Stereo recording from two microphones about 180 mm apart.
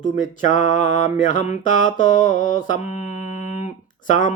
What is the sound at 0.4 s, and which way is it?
Mantra, 45° left (ahead or behind).